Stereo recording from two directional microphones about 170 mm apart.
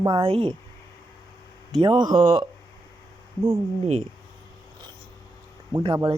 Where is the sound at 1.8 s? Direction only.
25° right (ahead or behind).